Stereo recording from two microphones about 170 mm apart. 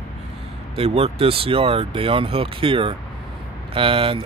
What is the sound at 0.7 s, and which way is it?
Speech, 35° right (ahead or behind).